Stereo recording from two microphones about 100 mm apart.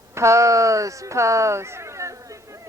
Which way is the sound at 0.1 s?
30° right (ahead or behind).